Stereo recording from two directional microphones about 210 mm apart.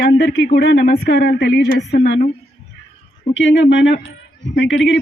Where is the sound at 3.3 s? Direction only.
60° left (ahead or behind).